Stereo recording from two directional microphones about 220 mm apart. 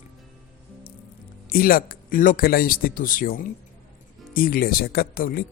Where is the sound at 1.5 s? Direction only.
40° left (ahead or behind).